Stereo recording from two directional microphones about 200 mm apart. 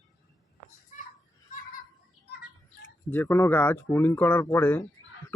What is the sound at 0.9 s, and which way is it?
Children playing, 40° left (ahead or behind).